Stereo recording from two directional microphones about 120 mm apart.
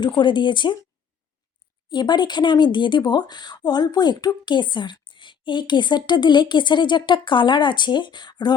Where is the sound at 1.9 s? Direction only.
35° left (ahead or behind).